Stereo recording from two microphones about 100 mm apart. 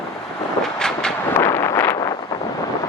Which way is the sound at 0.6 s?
5° left (ahead or behind).